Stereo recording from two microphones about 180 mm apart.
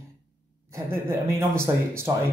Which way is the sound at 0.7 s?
15° right (ahead or behind).